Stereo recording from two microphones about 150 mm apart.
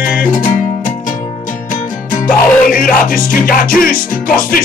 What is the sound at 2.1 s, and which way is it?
Music, 65° left (ahead or behind).